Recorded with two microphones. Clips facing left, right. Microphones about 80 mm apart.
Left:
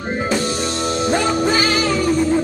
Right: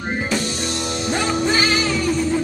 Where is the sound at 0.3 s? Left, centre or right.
Left.